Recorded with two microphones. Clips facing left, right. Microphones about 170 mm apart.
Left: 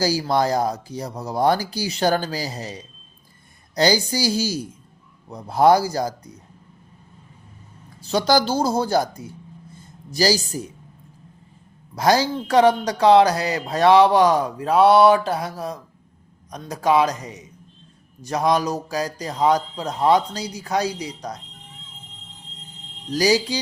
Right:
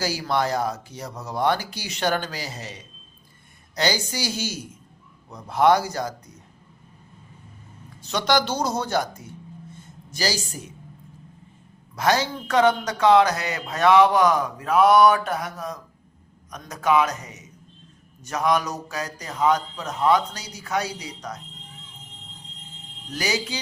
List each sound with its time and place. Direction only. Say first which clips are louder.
0.0 s speech: left 4 dB; 35° left (ahead or behind)
8.1 s speech: left 4 dB; 35° left (ahead or behind)
10.1 s speech: left 7 dB; 35° left (ahead or behind)
11.9 s speech: left 4 dB; 35° left (ahead or behind)
23.1 s speech: left 8 dB; 35° left (ahead or behind)